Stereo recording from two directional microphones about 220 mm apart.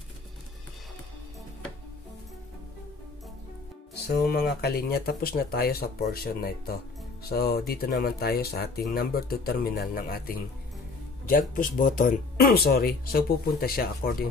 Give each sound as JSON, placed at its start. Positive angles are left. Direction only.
{"t": 3.9, "sound": "speech", "side_deg": 45}